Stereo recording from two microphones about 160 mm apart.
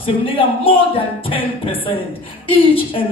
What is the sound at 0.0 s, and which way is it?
A man's voice, 35° left (ahead or behind).